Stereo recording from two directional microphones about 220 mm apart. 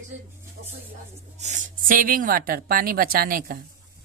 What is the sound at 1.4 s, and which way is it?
Speech, 35° right (ahead or behind).